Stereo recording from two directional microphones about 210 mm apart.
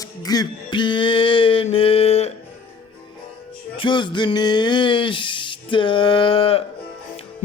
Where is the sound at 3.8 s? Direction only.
20° left (ahead or behind).